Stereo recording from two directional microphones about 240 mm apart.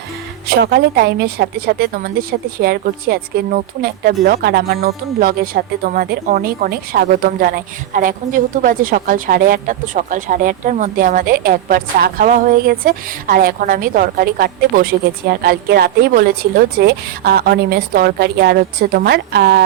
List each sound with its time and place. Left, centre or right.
0.4 s speech: right